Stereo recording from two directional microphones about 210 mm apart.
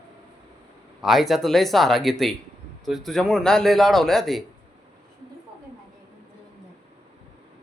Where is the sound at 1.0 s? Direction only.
Centre (ahead or behind).